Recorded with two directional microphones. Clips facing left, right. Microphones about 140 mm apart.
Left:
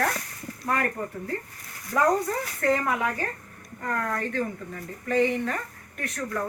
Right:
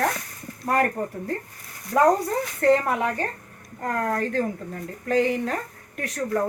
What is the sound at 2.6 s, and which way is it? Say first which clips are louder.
Speech: right 5 dB; 30° right (ahead or behind).